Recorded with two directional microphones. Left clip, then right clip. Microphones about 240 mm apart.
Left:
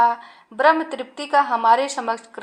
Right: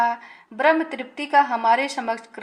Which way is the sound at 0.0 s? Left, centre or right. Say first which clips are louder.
Left 4 dB; centre.